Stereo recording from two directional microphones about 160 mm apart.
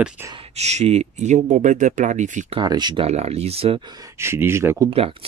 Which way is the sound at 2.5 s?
25° right (ahead or behind).